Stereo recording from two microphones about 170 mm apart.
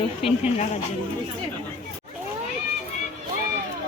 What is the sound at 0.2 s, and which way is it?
Speech, 35° left (ahead or behind).